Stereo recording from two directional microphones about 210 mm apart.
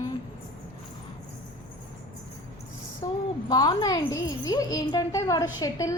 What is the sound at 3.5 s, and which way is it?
Speech, 20° left (ahead or behind).